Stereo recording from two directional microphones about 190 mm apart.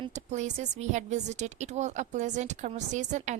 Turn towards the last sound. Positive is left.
turn(degrees=-40)  # may be behind; listen again after turning